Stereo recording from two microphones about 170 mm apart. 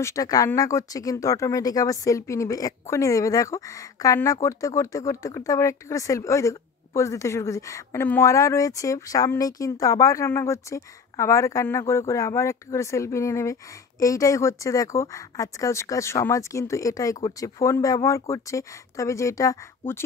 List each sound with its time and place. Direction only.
0.0 s speech: 20° left (ahead or behind)